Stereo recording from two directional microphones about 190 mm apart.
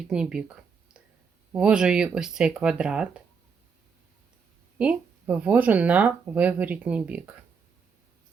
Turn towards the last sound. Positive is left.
turn(degrees=-5)  # may be behind; listen again after turning